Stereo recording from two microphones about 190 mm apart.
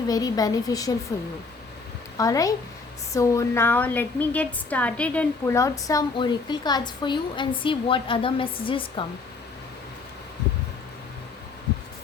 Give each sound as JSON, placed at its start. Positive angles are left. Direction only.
{"t": 0.1, "sound": "a woman's voice", "side_deg": 20}
{"t": 2.1, "sound": "a woman's voice", "side_deg": 20}